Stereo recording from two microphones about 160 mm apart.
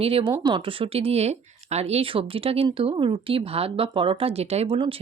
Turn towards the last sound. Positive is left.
turn(degrees=-35)  # may be behind; listen again after turning